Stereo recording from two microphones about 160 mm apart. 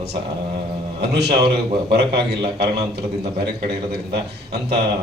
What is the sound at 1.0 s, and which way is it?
A man's voice, 90° right.